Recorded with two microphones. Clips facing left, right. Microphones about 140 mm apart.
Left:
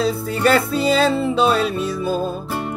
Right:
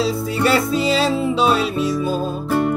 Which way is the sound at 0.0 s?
50° left (ahead or behind).